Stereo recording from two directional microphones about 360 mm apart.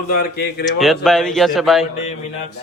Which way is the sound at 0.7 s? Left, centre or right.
Centre.